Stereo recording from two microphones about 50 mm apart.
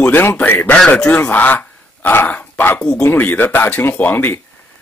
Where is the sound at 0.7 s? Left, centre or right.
Centre.